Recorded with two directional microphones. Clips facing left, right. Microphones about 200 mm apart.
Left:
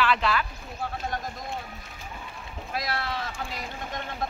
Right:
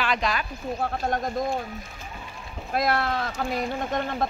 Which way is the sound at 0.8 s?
60° right (ahead or behind).